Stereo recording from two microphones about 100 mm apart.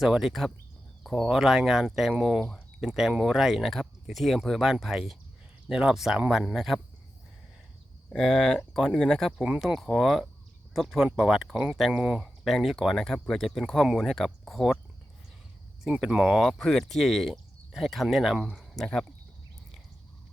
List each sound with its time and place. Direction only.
0.0 s speech: 5° right (ahead or behind)
8.1 s speech: 5° left (ahead or behind)
15.8 s speech: 5° right (ahead or behind)